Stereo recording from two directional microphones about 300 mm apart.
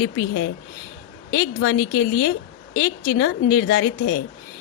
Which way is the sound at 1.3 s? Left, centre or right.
Left.